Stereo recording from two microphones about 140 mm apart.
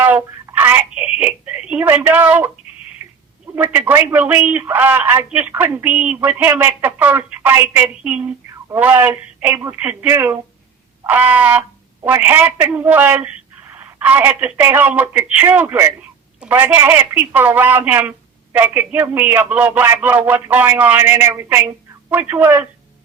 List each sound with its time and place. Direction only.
0.5 s speech: 15° right (ahead or behind)
3.0 s a sound: 15° right (ahead or behind)
3.4 s speech: 15° right (ahead or behind)